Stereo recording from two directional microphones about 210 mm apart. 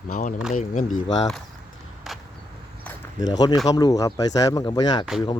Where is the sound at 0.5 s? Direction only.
35° left (ahead or behind).